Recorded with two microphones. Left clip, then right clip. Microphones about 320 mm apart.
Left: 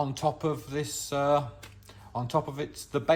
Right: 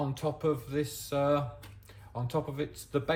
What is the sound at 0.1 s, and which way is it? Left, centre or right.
Speech, centre.